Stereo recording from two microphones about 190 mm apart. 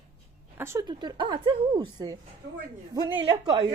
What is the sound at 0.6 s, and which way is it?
A woman's voice, 15° right (ahead or behind).